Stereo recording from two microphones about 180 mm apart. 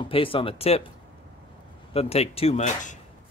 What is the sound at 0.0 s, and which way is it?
Speech, 30° left (ahead or behind).